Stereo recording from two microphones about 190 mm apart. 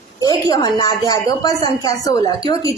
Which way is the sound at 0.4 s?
20° left (ahead or behind).